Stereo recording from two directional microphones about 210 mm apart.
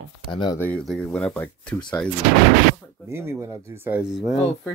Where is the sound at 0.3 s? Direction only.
20° left (ahead or behind).